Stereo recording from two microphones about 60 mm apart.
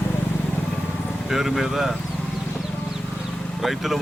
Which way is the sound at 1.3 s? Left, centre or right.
Centre.